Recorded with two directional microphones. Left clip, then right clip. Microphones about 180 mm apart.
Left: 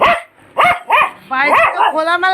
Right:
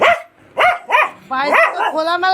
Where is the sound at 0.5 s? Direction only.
20° right (ahead or behind).